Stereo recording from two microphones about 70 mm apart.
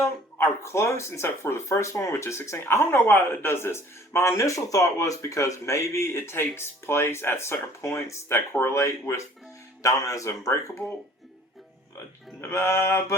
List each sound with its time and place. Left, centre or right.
0.3 s speech: left
12.4 s speech: left